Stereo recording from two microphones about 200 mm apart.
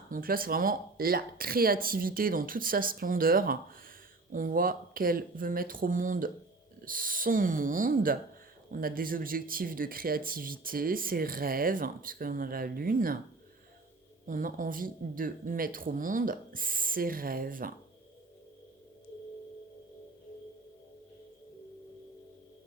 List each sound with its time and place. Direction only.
0.1 s speech: 45° right (ahead or behind)
14.3 s speech: 45° right (ahead or behind)